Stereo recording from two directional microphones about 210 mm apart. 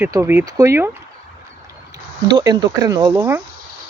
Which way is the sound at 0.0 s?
10° right (ahead or behind).